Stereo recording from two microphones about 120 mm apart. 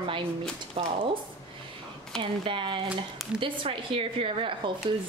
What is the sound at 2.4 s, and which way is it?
A woman's voice, 45° right (ahead or behind).